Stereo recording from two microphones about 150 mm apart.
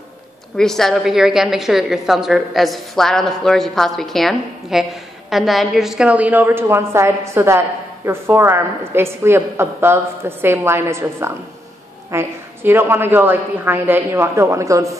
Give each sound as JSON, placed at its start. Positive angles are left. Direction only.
{"t": 0.6, "sound": "a woman's voice", "side_deg": 5}